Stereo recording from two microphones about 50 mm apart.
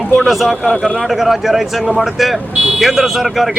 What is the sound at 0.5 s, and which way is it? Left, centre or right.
Speech, centre.